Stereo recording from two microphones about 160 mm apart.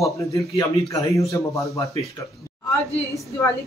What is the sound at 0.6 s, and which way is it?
Speech, 20° left (ahead or behind).